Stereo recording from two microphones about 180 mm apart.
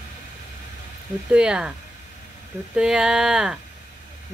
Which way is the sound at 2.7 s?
5° right (ahead or behind).